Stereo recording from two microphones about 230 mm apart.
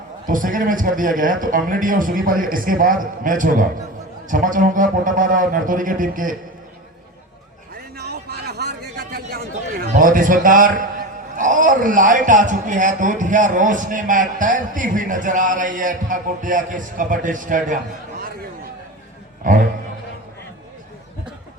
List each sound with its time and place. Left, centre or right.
0.3 s speech: right
7.9 s a sound: right
11.3 s speech: right